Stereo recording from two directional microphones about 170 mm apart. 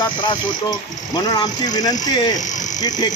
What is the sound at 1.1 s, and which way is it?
Speech, 25° left (ahead or behind).